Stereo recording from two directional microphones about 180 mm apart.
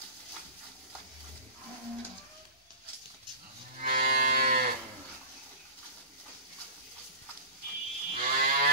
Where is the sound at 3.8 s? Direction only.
50° right (ahead or behind).